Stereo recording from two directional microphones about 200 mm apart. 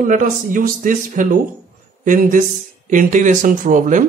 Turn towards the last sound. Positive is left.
turn(degrees=-40)  # may be behind; listen again after turning